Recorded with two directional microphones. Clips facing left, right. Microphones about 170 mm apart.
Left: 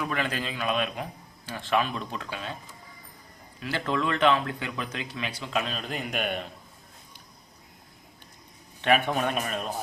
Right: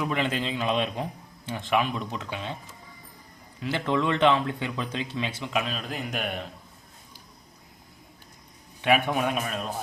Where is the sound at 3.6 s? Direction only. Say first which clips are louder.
Right 2 dB; 20° right (ahead or behind).